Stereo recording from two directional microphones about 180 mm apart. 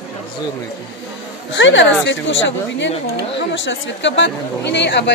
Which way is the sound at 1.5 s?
90° left.